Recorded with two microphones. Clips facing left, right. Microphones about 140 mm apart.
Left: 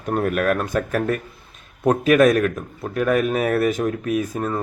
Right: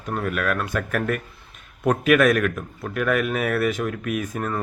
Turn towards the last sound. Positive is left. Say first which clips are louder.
# left 4 dB
turn(degrees=25)  # may be behind; listen again after turning